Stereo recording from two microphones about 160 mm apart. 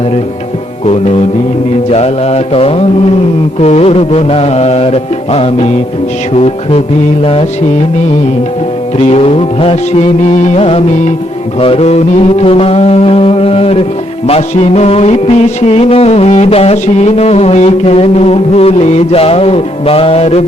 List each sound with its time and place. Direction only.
1.9 s music: 40° left (ahead or behind)
9.0 s music: 40° left (ahead or behind)